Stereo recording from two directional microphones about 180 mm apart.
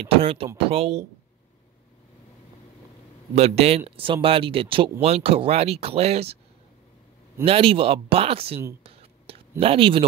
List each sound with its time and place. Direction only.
0.0 s speech: 30° right (ahead or behind)
3.3 s speech: 35° right (ahead or behind)
7.4 s speech: 30° right (ahead or behind)
9.6 s speech: 30° right (ahead or behind)